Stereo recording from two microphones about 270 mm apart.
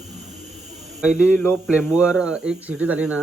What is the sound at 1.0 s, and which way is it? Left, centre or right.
Speech, centre.